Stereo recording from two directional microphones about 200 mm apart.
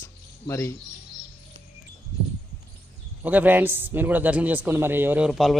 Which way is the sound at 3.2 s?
10° right (ahead or behind).